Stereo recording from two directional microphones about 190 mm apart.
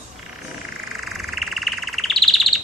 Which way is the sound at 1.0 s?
Centre (ahead or behind).